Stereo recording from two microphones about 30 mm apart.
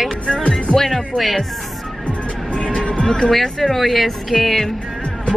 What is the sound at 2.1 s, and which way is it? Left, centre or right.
Music, left.